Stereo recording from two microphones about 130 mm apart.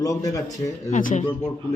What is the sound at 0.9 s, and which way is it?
Speech, 75° left (ahead or behind).